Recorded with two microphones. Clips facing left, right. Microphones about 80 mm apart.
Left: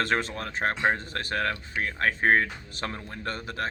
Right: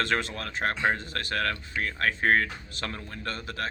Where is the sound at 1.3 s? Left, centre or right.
Left.